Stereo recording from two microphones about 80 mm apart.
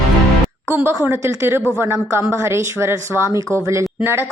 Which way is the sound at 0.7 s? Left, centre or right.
Right.